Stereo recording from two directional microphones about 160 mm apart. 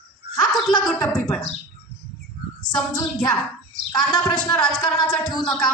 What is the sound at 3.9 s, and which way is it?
A man's voice, 25° left (ahead or behind).